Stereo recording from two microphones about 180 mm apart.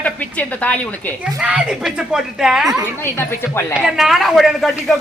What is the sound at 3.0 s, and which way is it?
Speech, 15° left (ahead or behind).